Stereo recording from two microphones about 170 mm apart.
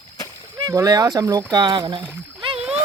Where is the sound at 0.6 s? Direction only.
20° right (ahead or behind).